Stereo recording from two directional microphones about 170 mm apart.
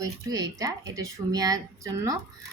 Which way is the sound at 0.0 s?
20° right (ahead or behind).